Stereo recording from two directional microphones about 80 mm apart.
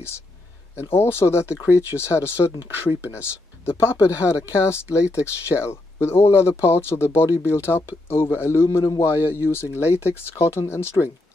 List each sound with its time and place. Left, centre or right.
0.7 s speech: left